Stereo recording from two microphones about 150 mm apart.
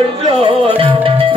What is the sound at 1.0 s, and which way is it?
Music, 35° right (ahead or behind).